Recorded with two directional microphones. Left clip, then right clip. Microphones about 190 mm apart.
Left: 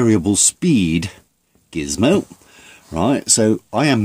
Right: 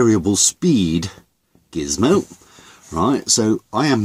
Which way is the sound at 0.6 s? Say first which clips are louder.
Even; 40° left (ahead or behind).